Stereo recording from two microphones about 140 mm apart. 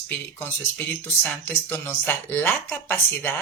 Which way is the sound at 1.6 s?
15° left (ahead or behind).